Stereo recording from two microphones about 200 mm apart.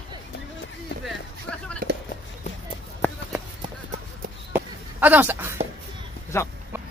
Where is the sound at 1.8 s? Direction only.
45° right (ahead or behind).